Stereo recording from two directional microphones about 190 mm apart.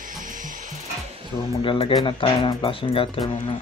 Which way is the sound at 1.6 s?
25° left (ahead or behind).